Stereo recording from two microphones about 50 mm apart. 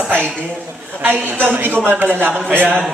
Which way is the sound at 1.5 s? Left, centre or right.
Right.